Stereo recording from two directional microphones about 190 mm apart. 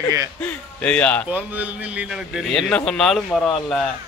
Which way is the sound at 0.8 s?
5° left (ahead or behind).